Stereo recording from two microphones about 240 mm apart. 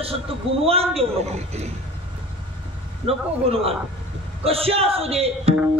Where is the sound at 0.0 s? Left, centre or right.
Right.